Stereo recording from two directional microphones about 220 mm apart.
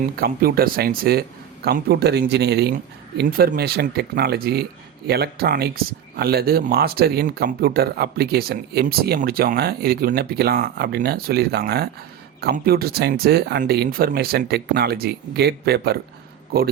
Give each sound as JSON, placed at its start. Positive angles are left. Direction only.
{"t": 0.2, "sound": "speech", "side_deg": -45}